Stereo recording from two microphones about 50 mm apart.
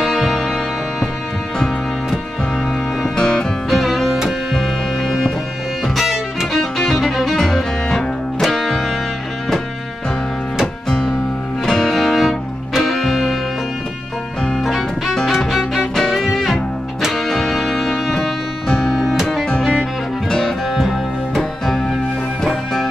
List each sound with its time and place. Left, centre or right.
0.0 s music: centre
3.2 s music: centre
3.7 s music: centre
10.9 s music: centre
14.6 s music: centre